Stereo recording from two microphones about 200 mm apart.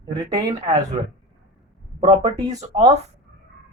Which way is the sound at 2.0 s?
30° right (ahead or behind).